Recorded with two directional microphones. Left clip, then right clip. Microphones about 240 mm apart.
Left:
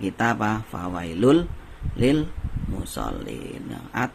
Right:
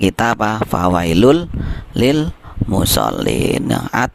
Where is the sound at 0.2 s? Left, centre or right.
Right.